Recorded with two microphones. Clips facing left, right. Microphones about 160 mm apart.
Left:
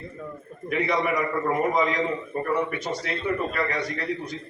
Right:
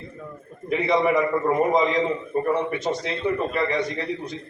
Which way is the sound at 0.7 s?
25° right (ahead or behind).